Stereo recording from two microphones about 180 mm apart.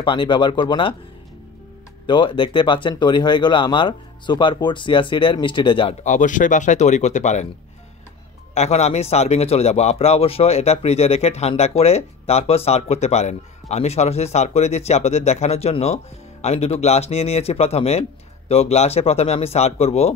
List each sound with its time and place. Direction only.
0.0 s speech: 25° left (ahead or behind)
2.0 s speech: 25° left (ahead or behind)
6.0 s speech: 45° left (ahead or behind)
8.5 s a man's voice: 35° left (ahead or behind)